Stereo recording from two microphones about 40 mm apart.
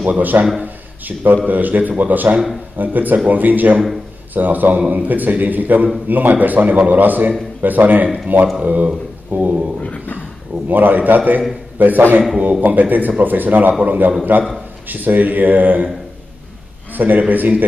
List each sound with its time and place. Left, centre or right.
0.0 s a man's voice: right
8.5 s speech: right
10.7 s a man's voice: right
16.9 s a man's voice: right